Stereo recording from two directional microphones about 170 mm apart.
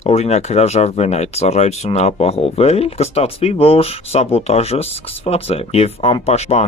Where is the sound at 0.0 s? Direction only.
40° left (ahead or behind).